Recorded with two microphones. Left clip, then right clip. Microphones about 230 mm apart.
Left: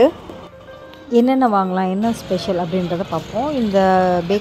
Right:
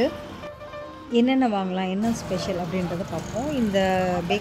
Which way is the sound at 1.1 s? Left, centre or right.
Centre.